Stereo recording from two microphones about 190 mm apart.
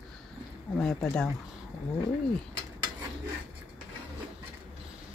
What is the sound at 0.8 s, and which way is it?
Speech, 5° left (ahead or behind).